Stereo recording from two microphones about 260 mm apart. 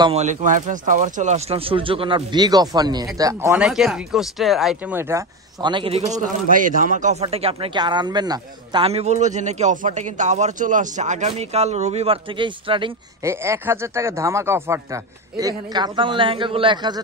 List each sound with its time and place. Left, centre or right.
0.0 s speech: right